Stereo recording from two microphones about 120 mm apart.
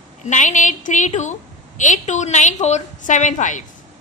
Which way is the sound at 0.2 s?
90° left.